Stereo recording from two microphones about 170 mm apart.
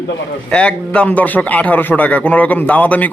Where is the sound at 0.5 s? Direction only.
5° left (ahead or behind).